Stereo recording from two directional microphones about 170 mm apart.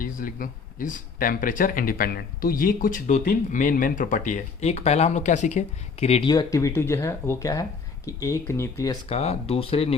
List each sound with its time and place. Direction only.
0.0 s speech: 55° left (ahead or behind); by 6.2 s 40° left (ahead or behind)
6.2 s speech: 20° left (ahead or behind)
9.0 s speech: 35° left (ahead or behind)